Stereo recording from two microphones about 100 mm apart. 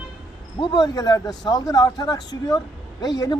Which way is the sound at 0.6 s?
45° left (ahead or behind).